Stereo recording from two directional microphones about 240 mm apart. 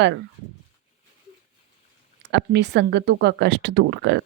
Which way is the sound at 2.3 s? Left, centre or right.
Right.